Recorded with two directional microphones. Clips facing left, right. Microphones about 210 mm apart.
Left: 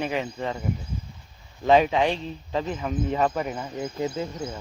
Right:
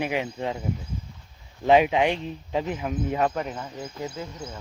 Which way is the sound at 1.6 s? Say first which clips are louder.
Even; 15° right (ahead or behind).